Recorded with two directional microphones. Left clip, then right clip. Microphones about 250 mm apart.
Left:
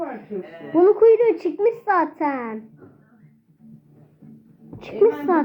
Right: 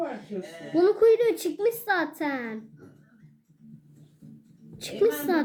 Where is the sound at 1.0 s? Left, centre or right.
Centre.